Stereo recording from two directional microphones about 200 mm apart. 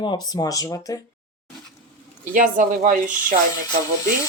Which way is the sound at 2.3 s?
40° right (ahead or behind).